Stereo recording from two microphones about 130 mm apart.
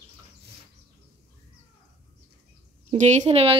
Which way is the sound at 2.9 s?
65° right (ahead or behind).